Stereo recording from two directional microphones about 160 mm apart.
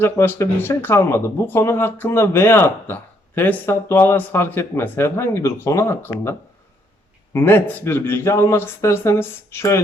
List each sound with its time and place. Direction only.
0.0 s speech: 15° left (ahead or behind)
7.3 s speech: 15° left (ahead or behind)